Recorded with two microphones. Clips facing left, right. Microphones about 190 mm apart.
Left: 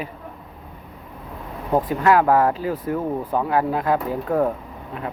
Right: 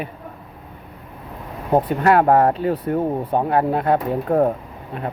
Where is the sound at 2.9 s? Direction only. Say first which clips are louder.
Right 1 dB; 30° right (ahead or behind).